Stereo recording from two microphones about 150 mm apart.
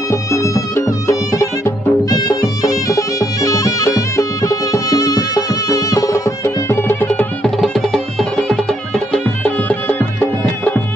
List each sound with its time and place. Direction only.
0.1 s music: 20° left (ahead or behind)
7.5 s music: centre (ahead or behind)